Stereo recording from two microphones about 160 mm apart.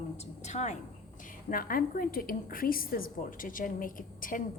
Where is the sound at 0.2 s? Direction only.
45° left (ahead or behind).